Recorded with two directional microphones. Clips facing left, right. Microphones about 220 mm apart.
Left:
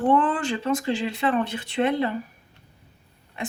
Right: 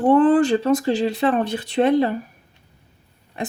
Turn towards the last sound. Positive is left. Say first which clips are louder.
# right 4 dB
turn(degrees=-35)  # may be behind; listen again after turning